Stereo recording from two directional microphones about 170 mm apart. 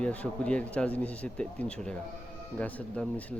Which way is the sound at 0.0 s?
5° left (ahead or behind).